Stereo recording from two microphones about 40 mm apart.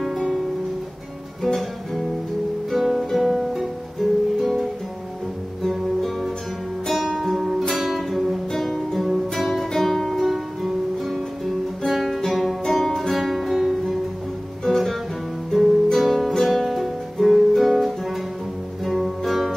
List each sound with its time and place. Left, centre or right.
0.0 s music: centre
1.4 s music: centre
2.7 s guitar: centre
3.1 s music: centre
5.6 s music: centre
8.5 s music: centre
13.2 s music: centre
14.6 s music: centre
15.5 s guitar: centre
16.4 s music: centre